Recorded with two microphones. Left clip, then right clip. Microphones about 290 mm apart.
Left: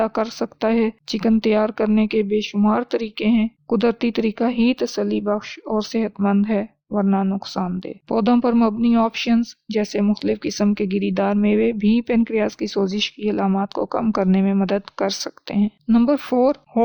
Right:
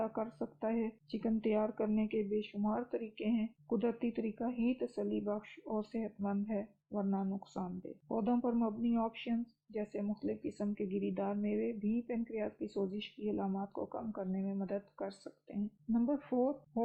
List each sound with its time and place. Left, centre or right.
0.0 s speech: left